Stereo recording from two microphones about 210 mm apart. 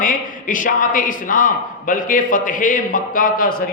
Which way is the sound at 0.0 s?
40° left (ahead or behind).